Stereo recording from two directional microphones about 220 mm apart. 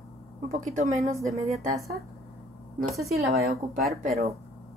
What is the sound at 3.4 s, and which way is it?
Speech, 40° right (ahead or behind).